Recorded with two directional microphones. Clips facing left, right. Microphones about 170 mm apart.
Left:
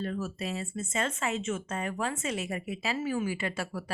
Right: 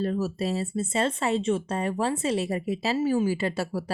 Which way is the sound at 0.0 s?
35° right (ahead or behind).